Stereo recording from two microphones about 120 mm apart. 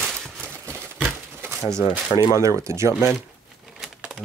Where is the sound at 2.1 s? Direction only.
30° left (ahead or behind).